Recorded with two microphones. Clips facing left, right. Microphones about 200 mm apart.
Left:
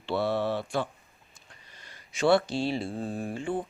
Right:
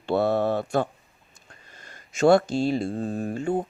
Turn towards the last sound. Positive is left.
turn(degrees=-40)  # may be behind; listen again after turning